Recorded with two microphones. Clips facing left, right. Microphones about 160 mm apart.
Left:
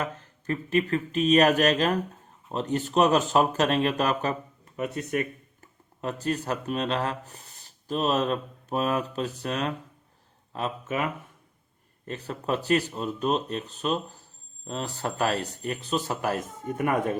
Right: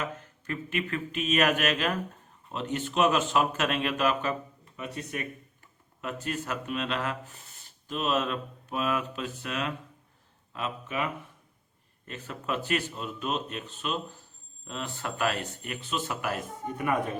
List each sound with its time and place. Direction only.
0.0 s speech: 35° left (ahead or behind)